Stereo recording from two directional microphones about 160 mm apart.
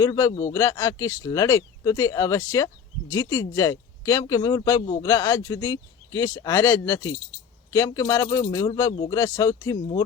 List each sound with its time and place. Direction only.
0.0 s speech: 20° left (ahead or behind)